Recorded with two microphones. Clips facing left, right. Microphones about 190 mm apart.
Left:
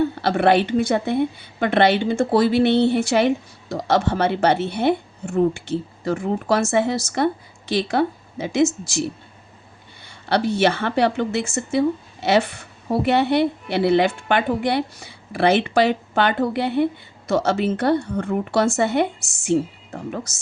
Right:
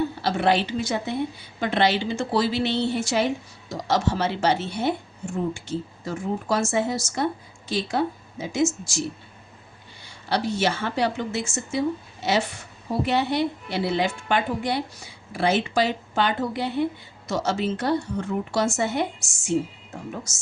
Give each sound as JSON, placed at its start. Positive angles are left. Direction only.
{"t": 0.2, "sound": "a woman's voice", "side_deg": 60}